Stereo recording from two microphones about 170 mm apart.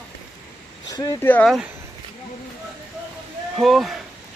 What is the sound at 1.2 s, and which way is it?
Speech, 10° left (ahead or behind).